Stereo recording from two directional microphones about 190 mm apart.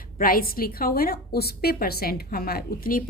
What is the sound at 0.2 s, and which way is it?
A woman's voice, 50° left (ahead or behind).